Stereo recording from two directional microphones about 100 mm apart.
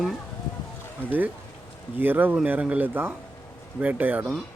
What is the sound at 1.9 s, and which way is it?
Speech, 20° right (ahead or behind).